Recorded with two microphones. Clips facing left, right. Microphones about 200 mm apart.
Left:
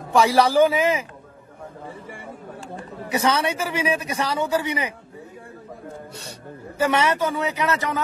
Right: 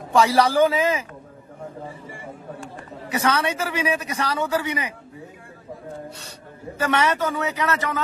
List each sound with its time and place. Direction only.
0.1 s a man's voice: 10° left (ahead or behind)
2.7 s a man's voice: 20° left (ahead or behind)
6.8 s a man's voice: 10° left (ahead or behind)